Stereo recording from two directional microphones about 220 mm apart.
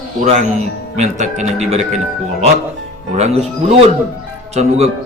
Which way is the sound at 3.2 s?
30° right (ahead or behind).